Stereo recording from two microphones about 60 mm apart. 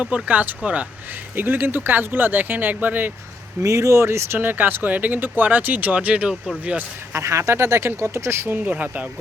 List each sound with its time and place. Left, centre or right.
0.0 s speech: right
3.6 s speech: right
4.4 s speech: right
7.1 s speech: right
8.4 s speech: right